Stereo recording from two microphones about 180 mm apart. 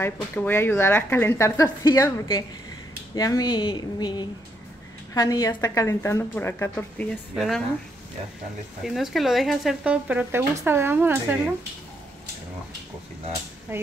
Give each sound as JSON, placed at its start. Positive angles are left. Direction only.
{"t": 0.0, "sound": "a woman's voice", "side_deg": 10}
{"t": 8.8, "sound": "speech", "side_deg": 0}